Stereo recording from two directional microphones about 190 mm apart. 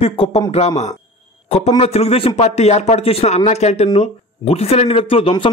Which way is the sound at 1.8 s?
30° left (ahead or behind).